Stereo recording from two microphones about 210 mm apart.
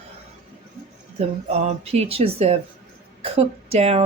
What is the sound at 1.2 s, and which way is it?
A woman's voice, 30° right (ahead or behind).